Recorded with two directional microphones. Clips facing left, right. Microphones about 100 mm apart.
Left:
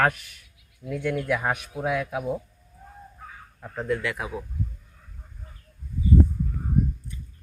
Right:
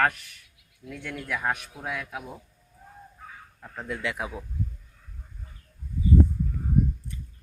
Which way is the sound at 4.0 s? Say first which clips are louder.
Left 1 dB; 20° right (ahead or behind).